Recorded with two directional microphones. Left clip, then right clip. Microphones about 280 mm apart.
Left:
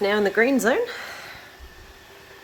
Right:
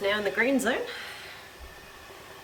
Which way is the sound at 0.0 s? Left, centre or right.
Centre.